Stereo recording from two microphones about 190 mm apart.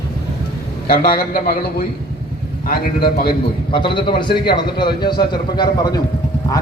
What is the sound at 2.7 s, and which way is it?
Speech, 50° left (ahead or behind).